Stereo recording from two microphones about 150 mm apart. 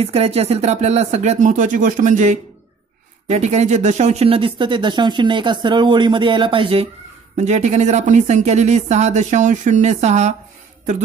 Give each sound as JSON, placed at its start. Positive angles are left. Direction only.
{"t": 0.0, "sound": "speech", "side_deg": -45}
{"t": 7.3, "sound": "speech", "side_deg": -50}